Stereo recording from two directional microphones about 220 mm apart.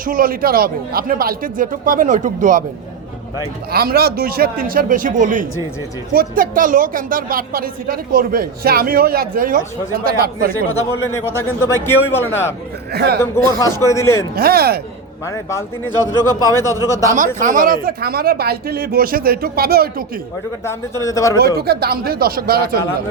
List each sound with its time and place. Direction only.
0.0 s speech: 40° right (ahead or behind)
3.7 s speech: 45° right (ahead or behind)
11.3 s a man's voice: 10° left (ahead or behind)
12.9 s speech: 45° right (ahead or behind)
13.8 s a man's voice: 15° left (ahead or behind)
14.3 s speech: 45° right (ahead or behind)
15.3 s a man's voice: 15° left (ahead or behind)
17.1 s speech: 35° right (ahead or behind)
20.7 s a man's voice: 15° left (ahead or behind)
21.6 s speech: 45° right (ahead or behind)